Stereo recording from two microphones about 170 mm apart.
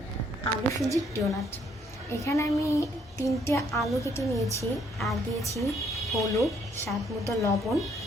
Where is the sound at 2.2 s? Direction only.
15° left (ahead or behind).